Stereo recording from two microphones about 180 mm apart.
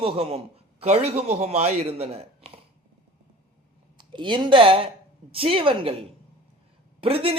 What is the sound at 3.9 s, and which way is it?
A man's voice, 25° right (ahead or behind).